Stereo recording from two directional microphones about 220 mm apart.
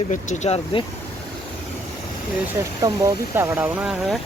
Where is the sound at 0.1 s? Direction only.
35° left (ahead or behind).